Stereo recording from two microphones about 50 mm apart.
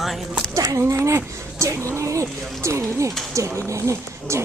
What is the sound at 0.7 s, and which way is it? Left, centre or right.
Speech, right.